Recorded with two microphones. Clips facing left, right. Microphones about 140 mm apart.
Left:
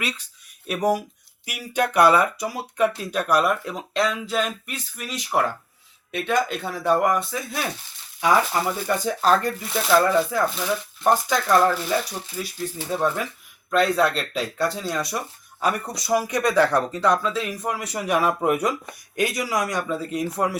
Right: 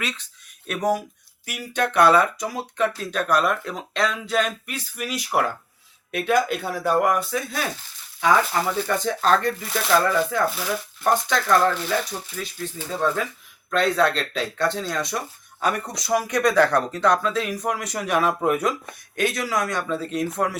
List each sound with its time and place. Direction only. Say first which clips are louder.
0.0 s speech: left 1 dB; 10° left (ahead or behind)